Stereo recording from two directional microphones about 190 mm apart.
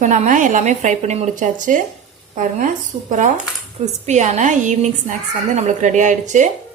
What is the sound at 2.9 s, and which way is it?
Dishes, 30° right (ahead or behind).